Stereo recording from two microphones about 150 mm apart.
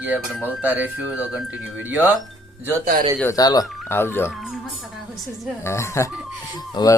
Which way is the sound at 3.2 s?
25° left (ahead or behind).